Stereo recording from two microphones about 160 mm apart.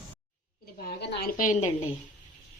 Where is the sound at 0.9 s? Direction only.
70° left (ahead or behind); by 1.7 s 55° left (ahead or behind).